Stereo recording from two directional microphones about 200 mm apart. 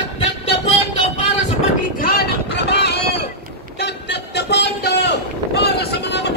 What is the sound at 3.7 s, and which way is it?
Vehicle, 60° left (ahead or behind).